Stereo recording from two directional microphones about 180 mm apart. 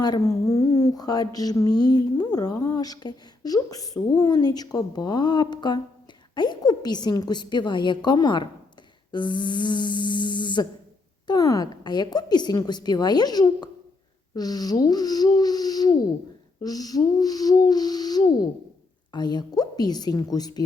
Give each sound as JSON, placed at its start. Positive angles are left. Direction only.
{"t": 0.0, "sound": "speech", "side_deg": 20}